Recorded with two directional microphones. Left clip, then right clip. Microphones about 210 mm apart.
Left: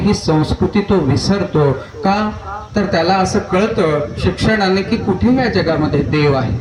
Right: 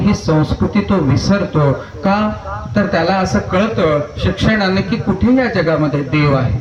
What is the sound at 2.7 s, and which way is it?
Speech, 50° left (ahead or behind).